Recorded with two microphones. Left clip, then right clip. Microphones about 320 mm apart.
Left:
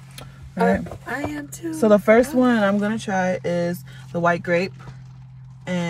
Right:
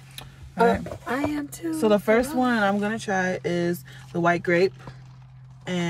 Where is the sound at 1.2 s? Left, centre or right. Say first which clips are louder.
Right 1 dB; centre.